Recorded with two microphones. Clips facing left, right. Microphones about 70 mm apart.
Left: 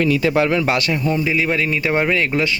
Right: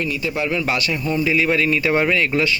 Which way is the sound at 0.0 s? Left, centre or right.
Left.